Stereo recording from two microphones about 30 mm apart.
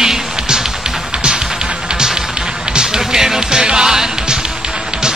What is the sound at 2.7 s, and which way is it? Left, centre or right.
Music, right.